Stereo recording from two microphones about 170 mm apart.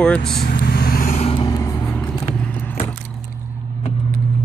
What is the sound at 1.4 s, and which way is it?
Vehicle, 20° left (ahead or behind).